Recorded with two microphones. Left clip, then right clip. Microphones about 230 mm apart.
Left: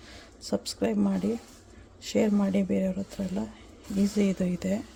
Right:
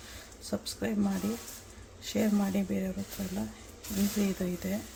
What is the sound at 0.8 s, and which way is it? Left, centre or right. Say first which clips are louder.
Speech: left 7 dB; left.